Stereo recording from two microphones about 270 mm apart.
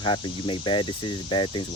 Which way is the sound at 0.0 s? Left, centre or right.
Centre.